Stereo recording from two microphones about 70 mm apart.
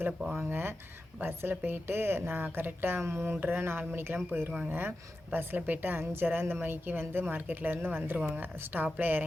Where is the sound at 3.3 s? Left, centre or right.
Right.